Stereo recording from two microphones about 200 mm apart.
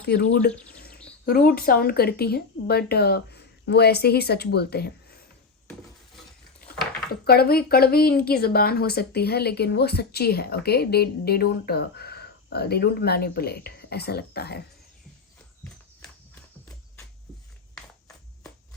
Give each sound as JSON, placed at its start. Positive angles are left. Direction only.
{"t": 0.0, "sound": "a woman's voice", "side_deg": 50}
{"t": 0.7, "sound": "bird", "side_deg": 50}
{"t": 1.2, "sound": "a woman's voice", "side_deg": 45}
{"t": 7.1, "sound": "a woman's voice", "side_deg": 50}